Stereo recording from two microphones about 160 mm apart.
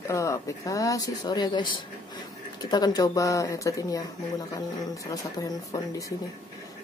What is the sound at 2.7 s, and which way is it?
Speech, 25° left (ahead or behind).